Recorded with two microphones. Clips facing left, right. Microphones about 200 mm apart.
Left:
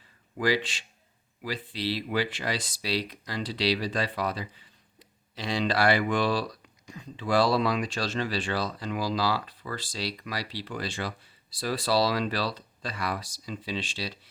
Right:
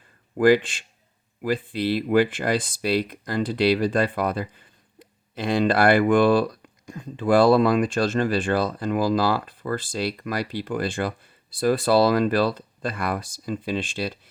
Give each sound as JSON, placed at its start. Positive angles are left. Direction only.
{"t": 0.3, "sound": "speech", "side_deg": -50}